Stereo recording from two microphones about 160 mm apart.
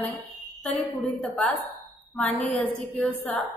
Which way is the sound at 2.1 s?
5° left (ahead or behind).